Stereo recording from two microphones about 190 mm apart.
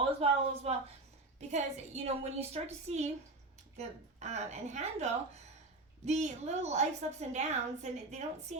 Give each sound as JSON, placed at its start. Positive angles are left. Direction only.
{"t": 0.2, "sound": "a woman's voice", "side_deg": -35}